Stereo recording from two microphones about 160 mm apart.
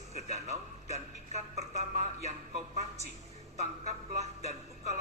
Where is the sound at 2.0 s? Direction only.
45° left (ahead or behind).